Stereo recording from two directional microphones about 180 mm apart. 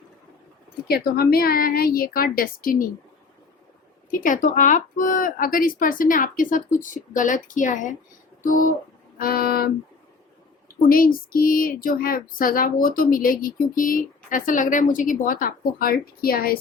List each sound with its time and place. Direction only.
0.9 s a woman's voice: 60° left (ahead or behind)
4.1 s a woman's voice: 45° left (ahead or behind)
10.8 s a woman's voice: 50° left (ahead or behind)